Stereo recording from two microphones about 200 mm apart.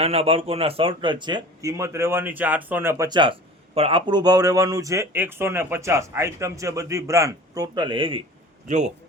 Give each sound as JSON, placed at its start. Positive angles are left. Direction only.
{"t": 0.0, "sound": "a man's voice", "side_deg": -30}
{"t": 8.6, "sound": "a man's voice", "side_deg": -35}